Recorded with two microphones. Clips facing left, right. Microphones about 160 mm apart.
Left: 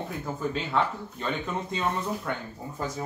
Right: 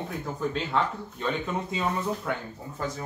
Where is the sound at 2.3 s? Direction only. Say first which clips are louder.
Right 1 dB; 5° right (ahead or behind).